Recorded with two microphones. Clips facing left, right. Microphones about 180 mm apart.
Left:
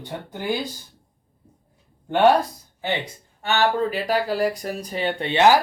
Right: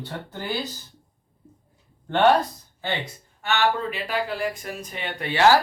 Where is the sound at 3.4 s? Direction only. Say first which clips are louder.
Left 3 dB; 35° left (ahead or behind); by 5.6 s 20° left (ahead or behind).